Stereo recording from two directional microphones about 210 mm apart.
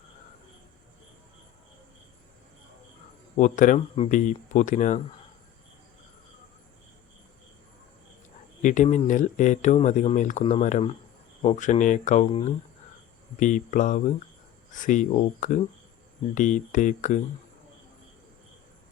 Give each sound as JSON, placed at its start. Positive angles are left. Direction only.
{"t": 3.3, "sound": "speech", "side_deg": 40}
{"t": 8.6, "sound": "speech", "side_deg": 35}
{"t": 12.3, "sound": "speech", "side_deg": 25}